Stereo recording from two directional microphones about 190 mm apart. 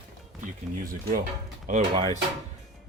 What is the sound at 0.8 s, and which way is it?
Speech, 45° right (ahead or behind).